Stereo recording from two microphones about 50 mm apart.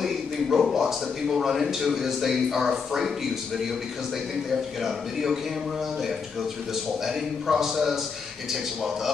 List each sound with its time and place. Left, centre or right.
0.0 s a man's voice: centre
4.8 s a man's voice: centre
7.1 s a man's voice: centre